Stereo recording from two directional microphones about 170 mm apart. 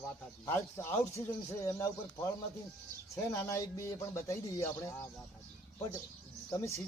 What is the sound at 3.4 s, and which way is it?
Speech, 20° left (ahead or behind).